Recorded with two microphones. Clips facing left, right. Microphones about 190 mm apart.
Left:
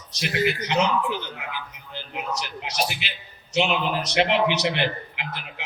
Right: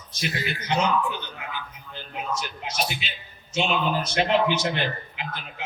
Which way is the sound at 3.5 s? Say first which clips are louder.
Left 1 dB; 75° left (ahead or behind).